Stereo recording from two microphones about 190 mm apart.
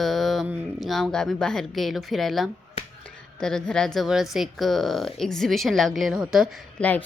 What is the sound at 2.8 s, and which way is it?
Finger snapping, 30° left (ahead or behind).